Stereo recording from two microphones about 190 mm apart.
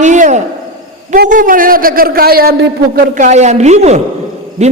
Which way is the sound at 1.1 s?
45° right (ahead or behind).